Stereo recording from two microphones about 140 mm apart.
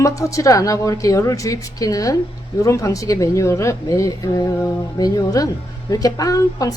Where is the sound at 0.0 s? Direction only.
20° left (ahead or behind).